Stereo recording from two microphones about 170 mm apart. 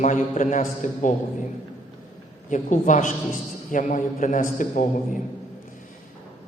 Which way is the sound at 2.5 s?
45° left (ahead or behind).